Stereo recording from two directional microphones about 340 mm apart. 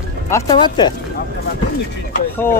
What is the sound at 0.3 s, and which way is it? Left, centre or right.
Speech, centre.